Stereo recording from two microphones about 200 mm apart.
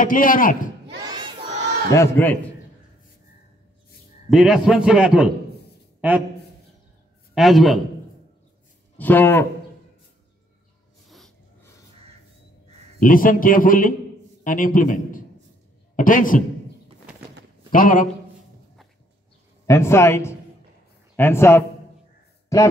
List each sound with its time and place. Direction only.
0.0 s a man's voice: 45° left (ahead or behind)
1.0 s crowd: 20° right (ahead or behind)
1.9 s a man's voice: 10° left (ahead or behind)
4.3 s a man's voice: centre (ahead or behind)
5.9 s a sound: 10° right (ahead or behind)
7.3 s a man's voice: centre (ahead or behind)
8.9 s a man's voice: 10° left (ahead or behind)
11.1 s snort: centre (ahead or behind)
13.0 s a man's voice: 45° left (ahead or behind)
17.6 s a man's voice: 45° left (ahead or behind)
19.6 s a man's voice: 15° left (ahead or behind)